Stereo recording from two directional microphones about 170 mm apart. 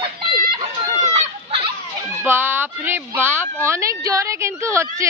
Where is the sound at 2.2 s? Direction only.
15° right (ahead or behind).